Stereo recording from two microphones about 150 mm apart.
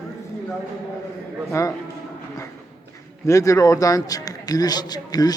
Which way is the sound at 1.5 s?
20° left (ahead or behind).